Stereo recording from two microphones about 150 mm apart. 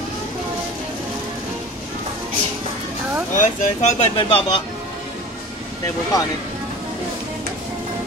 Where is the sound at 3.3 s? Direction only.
55° left (ahead or behind).